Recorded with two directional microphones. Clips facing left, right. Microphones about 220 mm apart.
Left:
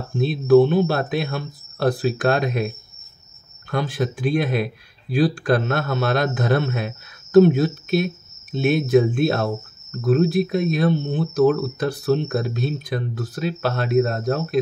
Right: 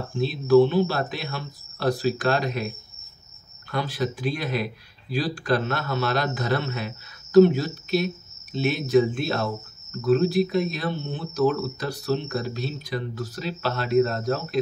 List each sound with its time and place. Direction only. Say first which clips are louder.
0.2 s speech: left 3 dB; 55° left (ahead or behind)
3.7 s speech: left 3 dB; 50° left (ahead or behind)